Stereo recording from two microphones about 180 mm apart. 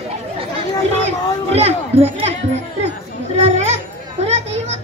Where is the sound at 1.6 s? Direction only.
35° right (ahead or behind).